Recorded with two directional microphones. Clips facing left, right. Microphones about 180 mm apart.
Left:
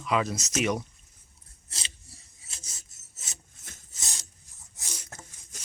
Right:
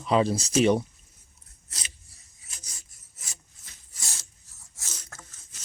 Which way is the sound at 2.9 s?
25° left (ahead or behind).